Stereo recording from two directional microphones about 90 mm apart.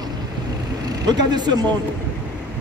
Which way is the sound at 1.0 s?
50° right (ahead or behind).